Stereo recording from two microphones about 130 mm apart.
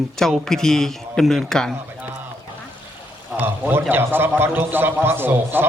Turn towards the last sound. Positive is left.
turn(degrees=-15)  # may be behind; listen again after turning